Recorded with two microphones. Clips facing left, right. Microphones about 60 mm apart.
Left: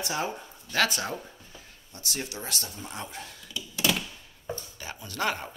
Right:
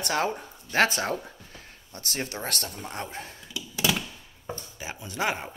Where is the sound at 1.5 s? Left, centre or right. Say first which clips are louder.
Right 3 dB; right.